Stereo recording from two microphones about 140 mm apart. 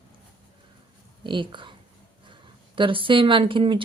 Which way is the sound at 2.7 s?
35° right (ahead or behind).